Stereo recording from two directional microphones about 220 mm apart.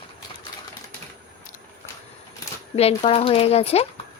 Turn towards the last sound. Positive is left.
turn(degrees=25)  # may be behind; listen again after turning